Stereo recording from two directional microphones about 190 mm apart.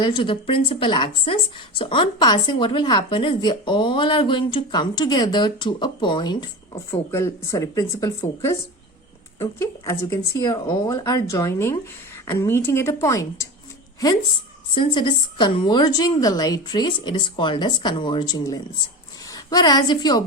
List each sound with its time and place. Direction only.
0.0 s a woman's voice: 25° left (ahead or behind)
14.8 s a woman's voice: 25° left (ahead or behind)